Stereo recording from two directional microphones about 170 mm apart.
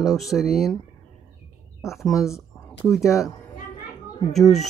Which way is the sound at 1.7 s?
Centre (ahead or behind).